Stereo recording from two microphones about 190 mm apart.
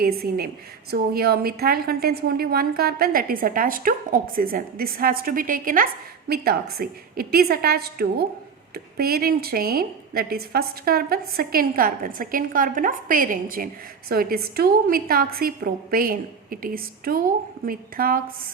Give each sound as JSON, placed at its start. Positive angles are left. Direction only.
{"t": 0.0, "sound": "a woman's voice", "side_deg": -55}